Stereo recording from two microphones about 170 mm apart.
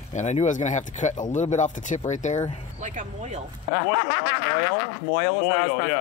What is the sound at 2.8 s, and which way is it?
Speech, 45° right (ahead or behind).